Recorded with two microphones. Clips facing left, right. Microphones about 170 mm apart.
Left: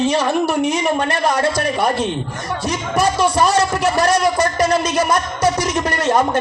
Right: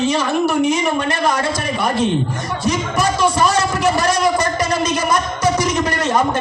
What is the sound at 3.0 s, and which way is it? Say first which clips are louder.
Speech: left 5 dB; 30° left (ahead or behind).